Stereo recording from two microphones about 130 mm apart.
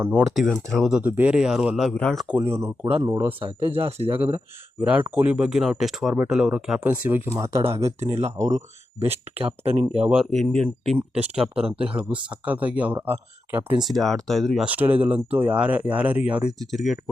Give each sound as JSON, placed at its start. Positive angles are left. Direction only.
{"t": 0.0, "sound": "speech", "side_deg": -15}
{"t": 0.3, "sound": "speech", "side_deg": 0}
{"t": 2.2, "sound": "speech", "side_deg": -15}
{"t": 3.4, "sound": "speech", "side_deg": -45}
{"t": 4.8, "sound": "speech", "side_deg": -10}
{"t": 7.3, "sound": "speech", "side_deg": -25}
{"t": 7.9, "sound": "speech", "side_deg": -55}
{"t": 8.4, "sound": "speech", "side_deg": -25}
{"t": 9.0, "sound": "speech", "side_deg": -50}
{"t": 9.9, "sound": "speech", "side_deg": -5}
{"t": 10.2, "sound": "speech", "side_deg": 5}
{"t": 10.9, "sound": "speech", "side_deg": -50}
{"t": 12.3, "sound": "speech", "side_deg": -10}
{"t": 13.8, "sound": "speech", "side_deg": 0}